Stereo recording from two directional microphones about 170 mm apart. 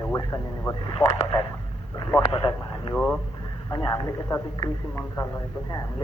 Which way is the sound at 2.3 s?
30° left (ahead or behind).